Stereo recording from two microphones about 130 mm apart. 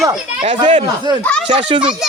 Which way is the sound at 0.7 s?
35° right (ahead or behind).